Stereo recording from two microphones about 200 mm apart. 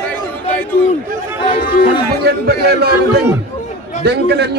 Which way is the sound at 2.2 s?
50° right (ahead or behind).